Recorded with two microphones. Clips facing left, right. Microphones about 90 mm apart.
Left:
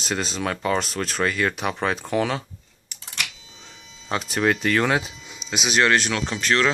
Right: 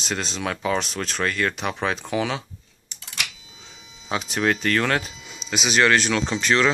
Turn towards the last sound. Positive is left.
turn(degrees=-5)  # may be behind; listen again after turning